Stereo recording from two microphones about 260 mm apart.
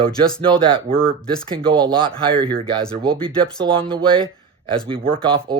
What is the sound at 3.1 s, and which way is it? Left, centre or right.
Speech, centre.